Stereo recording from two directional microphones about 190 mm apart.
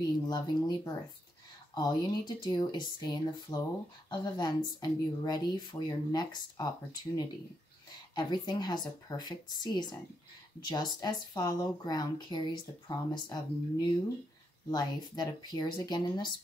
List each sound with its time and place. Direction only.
0.3 s speech: 20° left (ahead or behind)
8.1 s speech: 25° left (ahead or behind)